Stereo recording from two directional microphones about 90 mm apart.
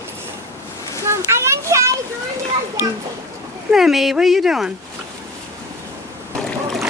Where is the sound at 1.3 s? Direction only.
30° right (ahead or behind).